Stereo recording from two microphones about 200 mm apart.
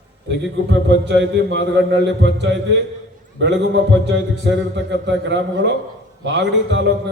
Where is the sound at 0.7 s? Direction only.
60° right (ahead or behind).